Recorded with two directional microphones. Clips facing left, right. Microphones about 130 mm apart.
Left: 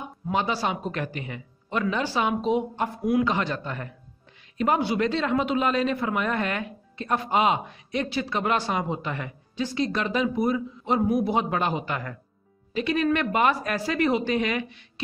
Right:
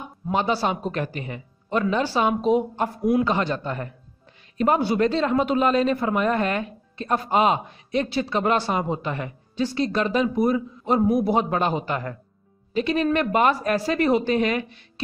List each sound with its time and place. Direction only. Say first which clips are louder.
0.3 s a man's voice: right 3 dB; 35° right (ahead or behind)